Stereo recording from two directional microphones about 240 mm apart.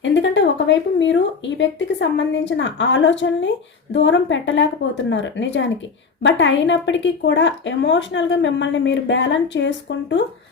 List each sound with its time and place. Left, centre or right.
0.0 s a woman's voice: left